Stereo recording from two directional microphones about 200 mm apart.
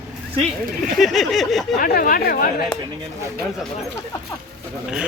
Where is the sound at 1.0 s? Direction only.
Centre (ahead or behind).